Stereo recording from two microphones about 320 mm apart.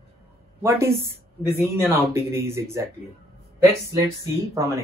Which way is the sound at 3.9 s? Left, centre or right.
Centre.